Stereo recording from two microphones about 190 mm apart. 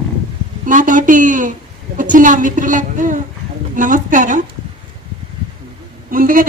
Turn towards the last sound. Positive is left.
turn(degrees=-45)  # may be behind; listen again after turning